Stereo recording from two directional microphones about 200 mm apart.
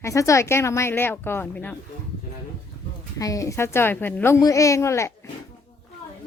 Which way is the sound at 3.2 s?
15° left (ahead or behind).